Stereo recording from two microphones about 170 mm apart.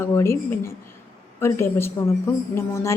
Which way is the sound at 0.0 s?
15° left (ahead or behind).